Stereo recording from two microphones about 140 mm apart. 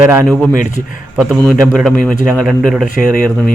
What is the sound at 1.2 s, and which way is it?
Speech, 5° left (ahead or behind).